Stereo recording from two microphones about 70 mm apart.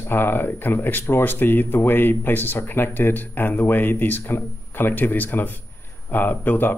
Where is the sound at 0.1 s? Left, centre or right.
Left.